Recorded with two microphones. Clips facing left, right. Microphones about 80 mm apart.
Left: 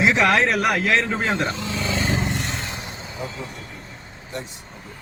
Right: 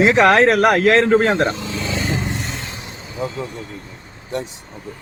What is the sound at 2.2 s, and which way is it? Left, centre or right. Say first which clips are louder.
Vehicle: even; centre.